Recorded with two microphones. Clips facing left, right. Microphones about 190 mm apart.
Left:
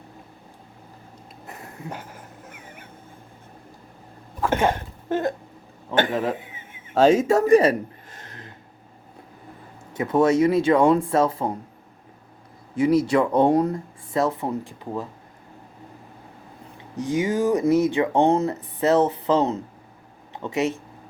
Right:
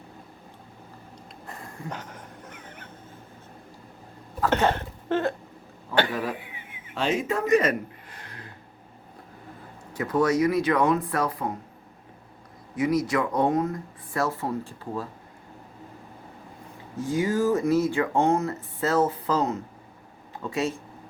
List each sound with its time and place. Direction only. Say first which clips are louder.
1.5 s dog: left 1 dB; 10° left (ahead or behind)
4.4 s a sound: left 1 dB; 10° left (ahead or behind)
5.9 s a sound: left 3 dB; 25° left (ahead or behind)
6.9 s speech: left 9 dB; 40° left (ahead or behind)
9.9 s speech: left 4 dB; 25° left (ahead or behind)
12.7 s speech: left 5 dB; 30° left (ahead or behind)
14.1 s speech: left 4 dB; 20° left (ahead or behind)
17.0 s speech: left 2 dB; 20° left (ahead or behind)